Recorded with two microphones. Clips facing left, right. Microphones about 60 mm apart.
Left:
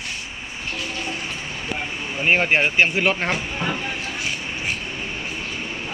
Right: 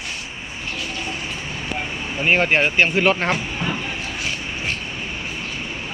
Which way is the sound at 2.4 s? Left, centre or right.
Centre.